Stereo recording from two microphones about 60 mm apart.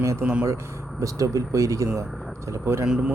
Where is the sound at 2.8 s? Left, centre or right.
Centre.